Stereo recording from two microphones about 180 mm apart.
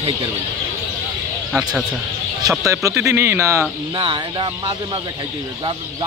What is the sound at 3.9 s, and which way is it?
Speech, 30° right (ahead or behind).